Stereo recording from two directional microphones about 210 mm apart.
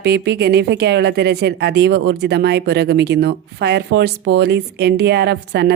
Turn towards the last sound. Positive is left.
turn(degrees=-50)  # may be behind; listen again after turning